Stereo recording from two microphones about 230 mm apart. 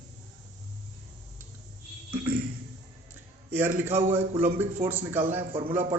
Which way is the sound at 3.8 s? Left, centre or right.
Centre.